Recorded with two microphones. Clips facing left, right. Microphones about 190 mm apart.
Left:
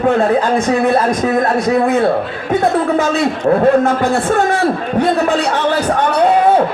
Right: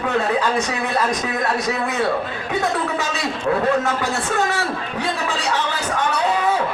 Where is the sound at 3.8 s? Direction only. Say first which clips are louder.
Left 8 dB; 55° left (ahead or behind).